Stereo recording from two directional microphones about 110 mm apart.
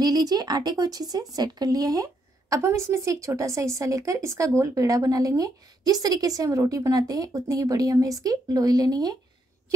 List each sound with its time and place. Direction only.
0.0 s a woman's voice: 35° right (ahead or behind)